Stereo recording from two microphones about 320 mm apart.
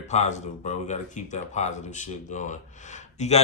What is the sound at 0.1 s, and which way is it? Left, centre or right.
Speech, left.